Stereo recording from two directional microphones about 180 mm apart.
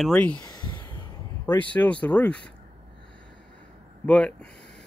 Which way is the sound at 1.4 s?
10° left (ahead or behind).